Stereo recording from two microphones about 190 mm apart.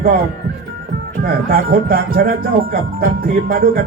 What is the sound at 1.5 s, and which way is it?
Speech, 50° right (ahead or behind).